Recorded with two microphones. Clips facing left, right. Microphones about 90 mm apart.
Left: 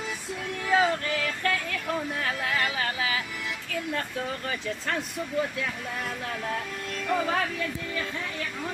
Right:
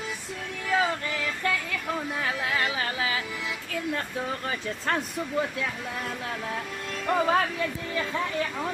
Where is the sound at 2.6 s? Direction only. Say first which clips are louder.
Even; 30° right (ahead or behind).